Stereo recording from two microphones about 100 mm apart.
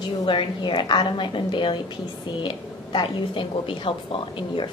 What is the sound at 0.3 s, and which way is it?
A woman's voice, 55° left (ahead or behind).